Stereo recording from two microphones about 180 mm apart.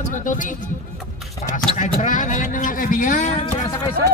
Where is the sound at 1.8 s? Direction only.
45° left (ahead or behind).